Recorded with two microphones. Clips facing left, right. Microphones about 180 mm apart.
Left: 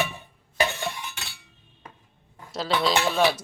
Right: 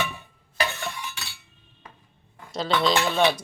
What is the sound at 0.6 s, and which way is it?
Stir, 25° left (ahead or behind).